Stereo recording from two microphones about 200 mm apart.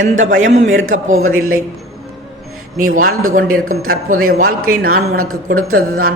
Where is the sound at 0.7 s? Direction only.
80° right.